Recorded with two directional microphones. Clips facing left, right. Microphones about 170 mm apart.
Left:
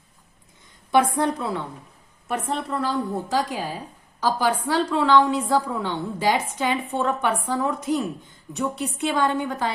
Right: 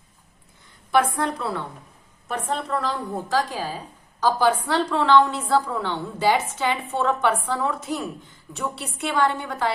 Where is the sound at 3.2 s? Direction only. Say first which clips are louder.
Even; 15° left (ahead or behind).